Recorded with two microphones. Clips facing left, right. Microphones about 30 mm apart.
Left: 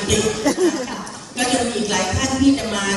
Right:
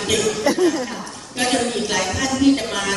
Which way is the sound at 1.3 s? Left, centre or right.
Centre.